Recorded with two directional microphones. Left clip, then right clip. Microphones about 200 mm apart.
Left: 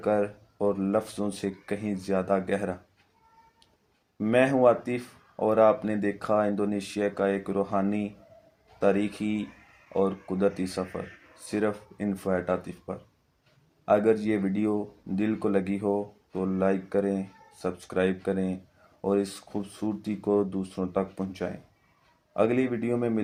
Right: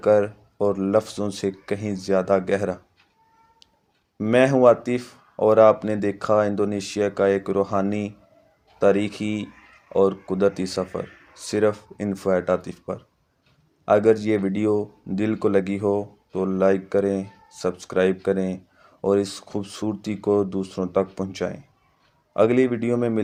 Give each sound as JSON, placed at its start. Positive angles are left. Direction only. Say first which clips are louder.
{"t": 0.0, "sound": "speech", "louder": "right 8 dB", "side_deg": -40}
{"t": 4.2, "sound": "speech", "louder": "right 5 dB", "side_deg": -40}